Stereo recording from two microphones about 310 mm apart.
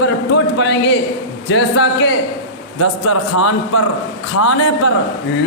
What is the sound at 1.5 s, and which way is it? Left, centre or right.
A man's voice, left.